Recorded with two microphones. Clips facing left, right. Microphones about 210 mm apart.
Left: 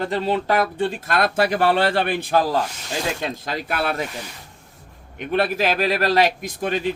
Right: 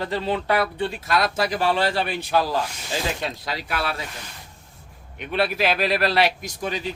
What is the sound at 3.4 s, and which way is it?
Speech, 50° left (ahead or behind).